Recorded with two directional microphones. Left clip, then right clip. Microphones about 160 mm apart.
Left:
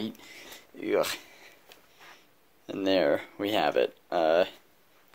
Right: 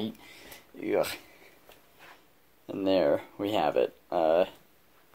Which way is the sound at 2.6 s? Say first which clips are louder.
Even; centre (ahead or behind).